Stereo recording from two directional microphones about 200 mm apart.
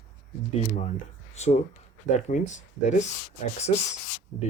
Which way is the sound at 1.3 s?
35° left (ahead or behind).